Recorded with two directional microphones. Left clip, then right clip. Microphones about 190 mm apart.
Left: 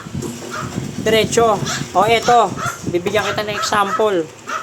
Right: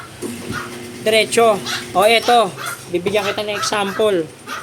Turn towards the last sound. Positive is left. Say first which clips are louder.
# left 2 dB
turn(degrees=-20)  # may be behind; listen again after turning